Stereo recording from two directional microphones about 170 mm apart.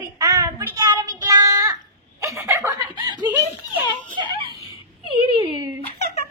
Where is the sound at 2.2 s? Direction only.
20° right (ahead or behind).